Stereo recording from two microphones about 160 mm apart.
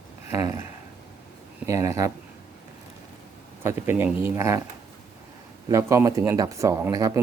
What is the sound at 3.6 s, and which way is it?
Speech, 15° right (ahead or behind).